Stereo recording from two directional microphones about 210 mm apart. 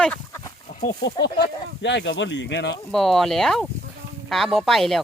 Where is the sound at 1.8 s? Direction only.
60° left (ahead or behind).